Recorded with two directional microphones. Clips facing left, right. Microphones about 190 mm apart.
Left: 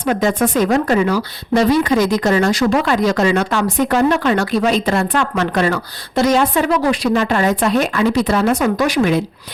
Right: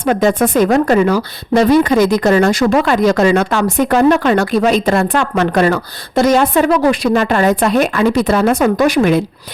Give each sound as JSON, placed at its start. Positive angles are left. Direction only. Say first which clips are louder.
{"t": 0.1, "sound": "speech", "louder": "right 3 dB", "side_deg": -55}